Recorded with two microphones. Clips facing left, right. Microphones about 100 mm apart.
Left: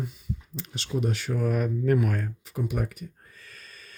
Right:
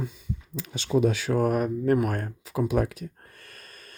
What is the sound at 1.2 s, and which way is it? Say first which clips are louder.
Speech: right 5 dB; 75° right (ahead or behind).